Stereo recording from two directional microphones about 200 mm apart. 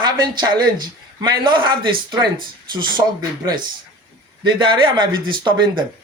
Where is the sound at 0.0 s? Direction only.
20° right (ahead or behind).